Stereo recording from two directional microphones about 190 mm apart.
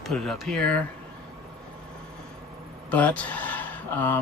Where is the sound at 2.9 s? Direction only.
5° left (ahead or behind).